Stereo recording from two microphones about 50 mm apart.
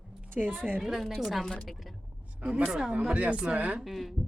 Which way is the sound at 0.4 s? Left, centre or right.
Centre.